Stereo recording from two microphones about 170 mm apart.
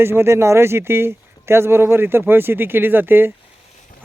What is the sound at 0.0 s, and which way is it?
Speech, 15° right (ahead or behind).